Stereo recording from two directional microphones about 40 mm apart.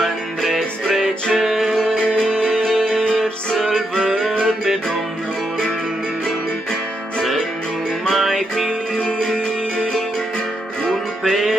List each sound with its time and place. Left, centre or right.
0.0 s music: centre
1.9 s music: centre
7.2 s music: centre
9.0 s music: centre
10.9 s music: centre